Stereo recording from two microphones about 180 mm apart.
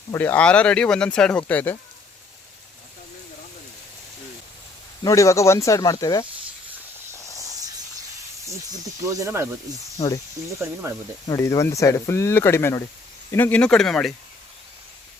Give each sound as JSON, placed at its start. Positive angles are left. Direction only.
{"t": 0.1, "sound": "speech", "side_deg": 10}
{"t": 5.0, "sound": "speech", "side_deg": 15}
{"t": 7.1, "sound": "hiss", "side_deg": 15}
{"t": 9.0, "sound": "speech", "side_deg": -15}
{"t": 10.8, "sound": "speech", "side_deg": -15}
{"t": 11.3, "sound": "speech", "side_deg": 15}